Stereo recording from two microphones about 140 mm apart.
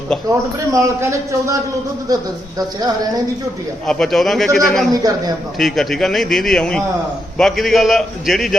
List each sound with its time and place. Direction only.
0.3 s a man's voice: 20° right (ahead or behind)
2.6 s a man's voice: 25° right (ahead or behind)
3.8 s a man's voice: 5° left (ahead or behind)
4.9 s a man's voice: 25° right (ahead or behind)
5.5 s a man's voice: centre (ahead or behind)